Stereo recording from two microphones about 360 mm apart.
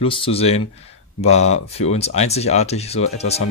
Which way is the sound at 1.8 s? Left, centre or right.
Centre.